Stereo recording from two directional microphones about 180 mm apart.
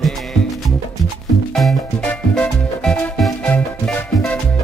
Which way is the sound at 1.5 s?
5° left (ahead or behind).